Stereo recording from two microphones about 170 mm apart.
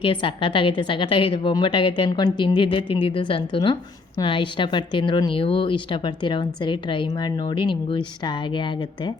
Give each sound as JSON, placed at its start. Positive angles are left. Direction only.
{"t": 0.0, "sound": "speech", "side_deg": 30}